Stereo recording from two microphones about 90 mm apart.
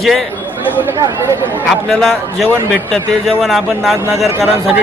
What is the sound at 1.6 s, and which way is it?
A man's voice, 5° left (ahead or behind).